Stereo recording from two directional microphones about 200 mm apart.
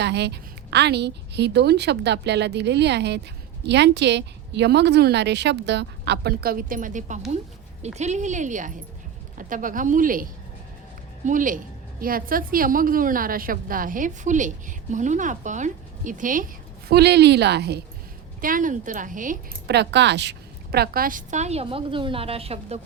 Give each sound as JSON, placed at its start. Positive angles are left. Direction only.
{"t": 0.0, "sound": "a woman's voice", "side_deg": -55}
{"t": 11.3, "sound": "a woman's voice", "side_deg": -40}
{"t": 16.9, "sound": "a woman's voice", "side_deg": -55}
{"t": 18.3, "sound": "a woman's voice", "side_deg": -45}
{"t": 19.7, "sound": "a woman's voice", "side_deg": -60}